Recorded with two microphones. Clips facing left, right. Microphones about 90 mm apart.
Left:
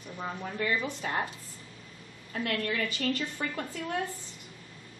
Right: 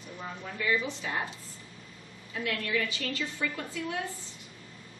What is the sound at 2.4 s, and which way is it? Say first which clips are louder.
A woman's voice: even; 45° left (ahead or behind).